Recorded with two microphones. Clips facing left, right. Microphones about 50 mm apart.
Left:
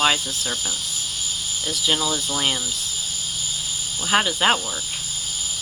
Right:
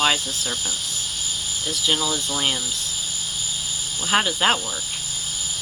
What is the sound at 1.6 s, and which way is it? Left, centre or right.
Speech, centre.